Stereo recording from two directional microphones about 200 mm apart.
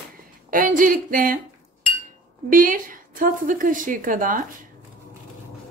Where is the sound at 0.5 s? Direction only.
40° right (ahead or behind).